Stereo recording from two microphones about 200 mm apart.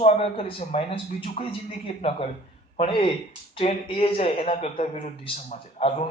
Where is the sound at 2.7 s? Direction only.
30° left (ahead or behind).